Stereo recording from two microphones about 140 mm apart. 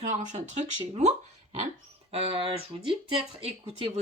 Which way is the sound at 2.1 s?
45° right (ahead or behind).